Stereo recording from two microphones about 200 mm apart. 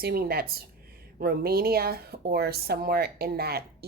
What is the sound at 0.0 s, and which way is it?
Speech, 50° right (ahead or behind).